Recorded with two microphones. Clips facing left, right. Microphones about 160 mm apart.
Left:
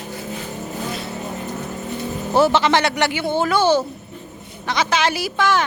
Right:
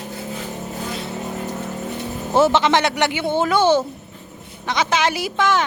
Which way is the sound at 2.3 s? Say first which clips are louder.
Even; 20° right (ahead or behind).